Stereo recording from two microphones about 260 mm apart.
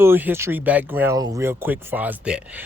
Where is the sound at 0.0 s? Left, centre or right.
Centre.